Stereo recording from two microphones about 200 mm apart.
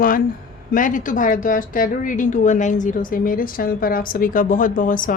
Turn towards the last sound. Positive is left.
turn(degrees=40)  # may be behind; listen again after turning